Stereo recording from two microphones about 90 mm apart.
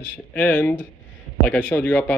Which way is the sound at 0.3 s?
15° left (ahead or behind).